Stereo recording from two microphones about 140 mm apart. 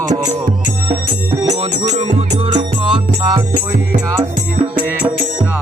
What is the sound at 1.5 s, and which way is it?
Music, 50° right (ahead or behind).